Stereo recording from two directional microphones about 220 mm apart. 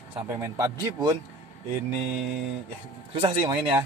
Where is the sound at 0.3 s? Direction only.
15° right (ahead or behind).